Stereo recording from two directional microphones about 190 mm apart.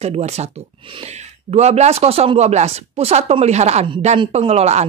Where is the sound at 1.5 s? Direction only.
35° right (ahead or behind).